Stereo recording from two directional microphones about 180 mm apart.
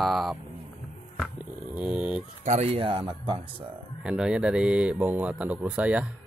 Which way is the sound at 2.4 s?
40° right (ahead or behind).